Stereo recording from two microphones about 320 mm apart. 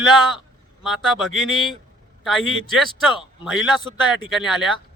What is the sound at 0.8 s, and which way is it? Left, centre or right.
A man's voice, centre.